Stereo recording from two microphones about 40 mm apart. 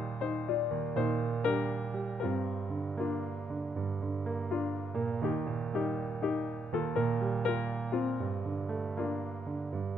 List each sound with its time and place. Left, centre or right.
0.2 s music: left
4.5 s music: centre